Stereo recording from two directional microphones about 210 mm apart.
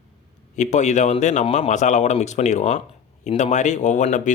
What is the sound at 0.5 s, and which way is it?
Speech, 35° left (ahead or behind).